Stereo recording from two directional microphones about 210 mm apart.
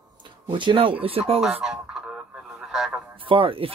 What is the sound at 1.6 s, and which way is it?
Radio, 5° right (ahead or behind).